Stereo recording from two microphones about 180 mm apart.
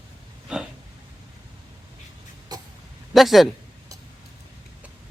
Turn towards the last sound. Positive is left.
turn(degrees=0)  # may be behind; listen again after turning